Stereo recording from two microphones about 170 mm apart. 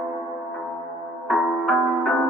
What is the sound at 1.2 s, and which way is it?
Music, centre (ahead or behind).